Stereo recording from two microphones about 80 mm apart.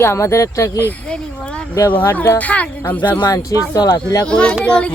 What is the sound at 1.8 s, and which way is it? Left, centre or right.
Speech, left.